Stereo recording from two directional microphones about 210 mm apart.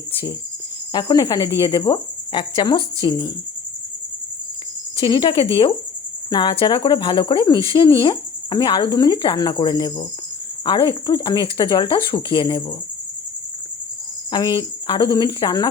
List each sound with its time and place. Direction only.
0.9 s speech: 20° left (ahead or behind)
4.9 s speech: 20° left (ahead or behind)
14.3 s speech: 20° left (ahead or behind)